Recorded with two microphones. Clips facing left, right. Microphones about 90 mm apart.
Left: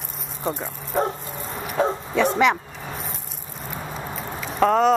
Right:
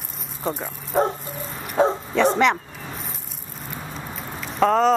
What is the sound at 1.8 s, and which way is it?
Speech, 30° right (ahead or behind).